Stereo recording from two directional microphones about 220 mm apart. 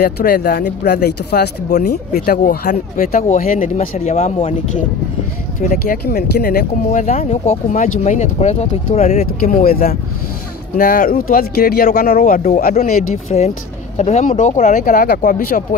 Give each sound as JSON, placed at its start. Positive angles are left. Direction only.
{"t": 0.0, "sound": "speech", "side_deg": 45}
{"t": 5.6, "sound": "speech", "side_deg": 40}